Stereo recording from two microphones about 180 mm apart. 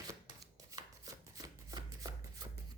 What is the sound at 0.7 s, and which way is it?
Chopping, 20° right (ahead or behind).